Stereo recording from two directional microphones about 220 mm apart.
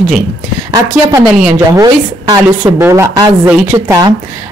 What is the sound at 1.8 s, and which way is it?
Speech, 15° right (ahead or behind).